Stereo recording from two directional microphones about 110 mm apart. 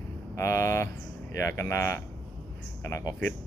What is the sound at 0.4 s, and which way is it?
Speech, 25° left (ahead or behind).